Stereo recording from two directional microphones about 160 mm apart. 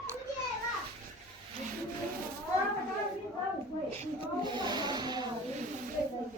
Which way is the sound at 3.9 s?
30° right (ahead or behind).